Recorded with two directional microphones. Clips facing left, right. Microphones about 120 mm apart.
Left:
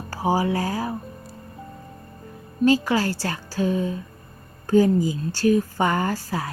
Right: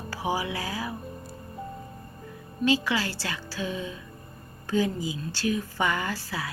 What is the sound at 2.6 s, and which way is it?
A woman's voice, 45° left (ahead or behind).